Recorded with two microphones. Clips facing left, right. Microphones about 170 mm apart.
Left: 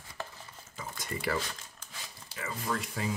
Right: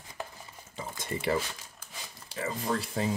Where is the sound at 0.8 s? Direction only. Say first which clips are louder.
Right 3 dB; 25° right (ahead or behind).